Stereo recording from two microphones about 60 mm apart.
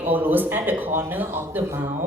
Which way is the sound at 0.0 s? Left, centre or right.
Right.